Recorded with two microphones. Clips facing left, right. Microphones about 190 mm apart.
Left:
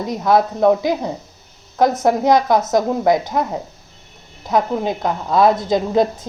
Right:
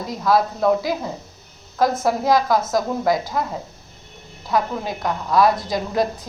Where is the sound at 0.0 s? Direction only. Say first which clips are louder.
Left 3 dB; 20° left (ahead or behind).